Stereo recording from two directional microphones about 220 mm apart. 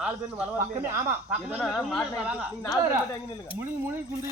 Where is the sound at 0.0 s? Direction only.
5° right (ahead or behind).